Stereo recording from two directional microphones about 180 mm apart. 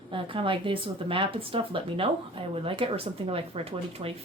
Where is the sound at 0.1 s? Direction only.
30° right (ahead or behind).